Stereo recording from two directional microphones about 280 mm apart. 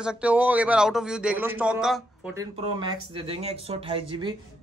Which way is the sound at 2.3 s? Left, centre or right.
Centre.